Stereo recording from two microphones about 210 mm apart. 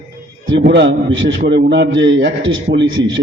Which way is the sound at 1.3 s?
55° right (ahead or behind).